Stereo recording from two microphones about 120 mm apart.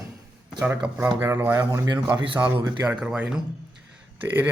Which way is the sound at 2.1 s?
15° right (ahead or behind).